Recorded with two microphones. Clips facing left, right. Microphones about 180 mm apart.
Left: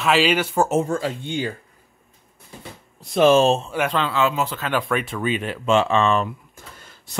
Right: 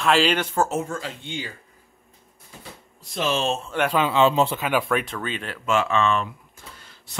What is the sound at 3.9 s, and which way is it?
Speech, 10° right (ahead or behind).